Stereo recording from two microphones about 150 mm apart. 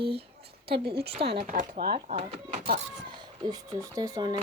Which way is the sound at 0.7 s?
90° right.